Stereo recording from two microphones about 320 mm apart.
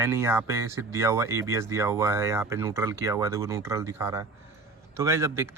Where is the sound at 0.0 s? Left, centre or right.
Centre.